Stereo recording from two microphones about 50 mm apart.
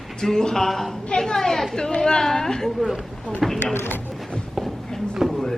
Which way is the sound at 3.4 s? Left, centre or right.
Centre.